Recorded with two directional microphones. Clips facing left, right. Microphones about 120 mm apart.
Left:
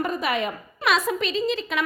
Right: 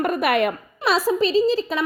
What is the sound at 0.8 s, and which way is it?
Speech, 35° right (ahead or behind).